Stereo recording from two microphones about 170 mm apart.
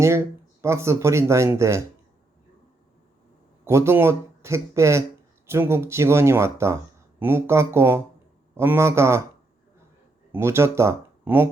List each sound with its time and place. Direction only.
0.6 s speech: 15° right (ahead or behind)
3.6 s speech: 15° right (ahead or behind)
10.3 s speech: 15° right (ahead or behind)